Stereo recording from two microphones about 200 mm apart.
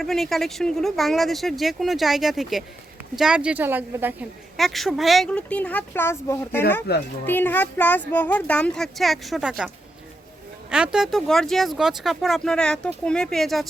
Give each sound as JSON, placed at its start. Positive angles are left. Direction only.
{"t": 0.0, "sound": "a woman's voice", "side_deg": 0}
{"t": 6.9, "sound": "a child's voice", "side_deg": 55}
{"t": 7.3, "sound": "a woman's voice", "side_deg": 10}